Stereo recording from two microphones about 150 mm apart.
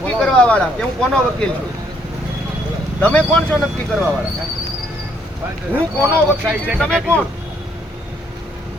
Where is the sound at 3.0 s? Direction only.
10° left (ahead or behind).